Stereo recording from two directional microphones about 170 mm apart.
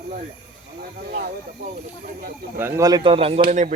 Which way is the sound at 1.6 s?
60° right (ahead or behind).